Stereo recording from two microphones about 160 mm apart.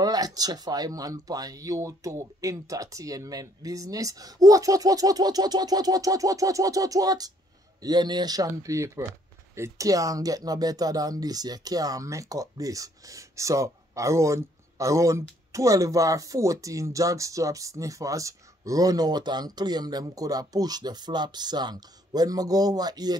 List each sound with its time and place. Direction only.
0.0 s speech: 25° right (ahead or behind)